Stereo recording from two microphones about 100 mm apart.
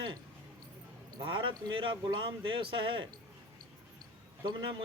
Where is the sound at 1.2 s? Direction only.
55° right (ahead or behind).